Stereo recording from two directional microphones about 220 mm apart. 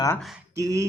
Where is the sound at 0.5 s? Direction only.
15° right (ahead or behind).